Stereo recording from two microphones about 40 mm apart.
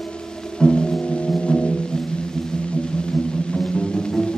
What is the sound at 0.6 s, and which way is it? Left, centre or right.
Music, left.